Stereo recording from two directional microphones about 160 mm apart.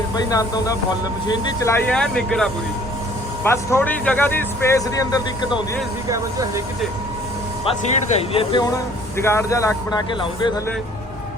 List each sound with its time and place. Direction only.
0.3 s speech: 20° left (ahead or behind)
1.9 s speech: 5° left (ahead or behind)
3.4 s speech: 15° left (ahead or behind)
8.3 s speech: 35° left (ahead or behind)
8.6 s speech: 20° left (ahead or behind)